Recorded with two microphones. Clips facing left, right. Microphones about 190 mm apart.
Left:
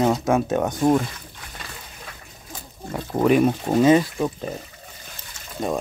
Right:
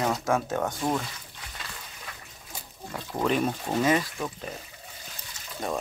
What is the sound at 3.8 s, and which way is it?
Speech, 25° left (ahead or behind).